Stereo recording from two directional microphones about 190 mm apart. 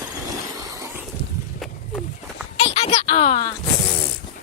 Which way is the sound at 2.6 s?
35° left (ahead or behind).